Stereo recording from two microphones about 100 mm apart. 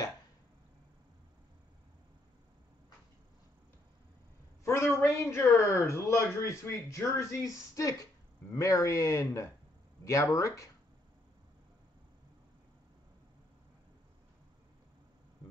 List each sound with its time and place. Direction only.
5.0 s speech: 30° left (ahead or behind)